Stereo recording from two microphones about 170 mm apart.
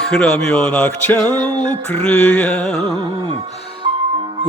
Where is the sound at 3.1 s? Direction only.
30° right (ahead or behind).